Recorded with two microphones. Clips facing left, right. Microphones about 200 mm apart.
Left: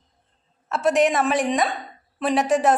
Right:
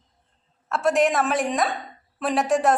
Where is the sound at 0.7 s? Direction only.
Centre (ahead or behind).